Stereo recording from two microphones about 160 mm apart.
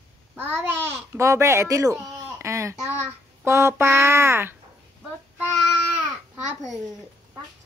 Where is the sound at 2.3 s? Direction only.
15° right (ahead or behind).